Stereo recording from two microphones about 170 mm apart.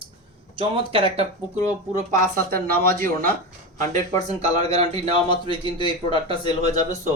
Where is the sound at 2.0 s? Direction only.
50° right (ahead or behind).